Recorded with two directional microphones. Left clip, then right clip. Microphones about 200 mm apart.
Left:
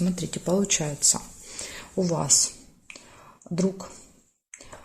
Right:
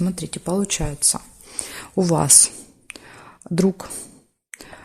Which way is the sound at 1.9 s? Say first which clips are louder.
Right 6 dB; 55° right (ahead or behind).